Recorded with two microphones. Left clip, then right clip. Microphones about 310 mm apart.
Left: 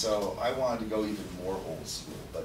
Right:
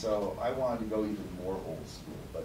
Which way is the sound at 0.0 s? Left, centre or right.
Centre.